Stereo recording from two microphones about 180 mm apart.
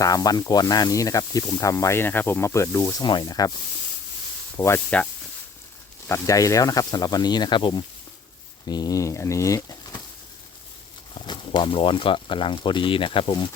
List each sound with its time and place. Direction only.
0.0 s speech: 20° left (ahead or behind)
4.5 s speech: 15° left (ahead or behind)
6.1 s speech: 20° left (ahead or behind)
8.6 s a sound: 20° left (ahead or behind)
11.1 s speech: 25° left (ahead or behind)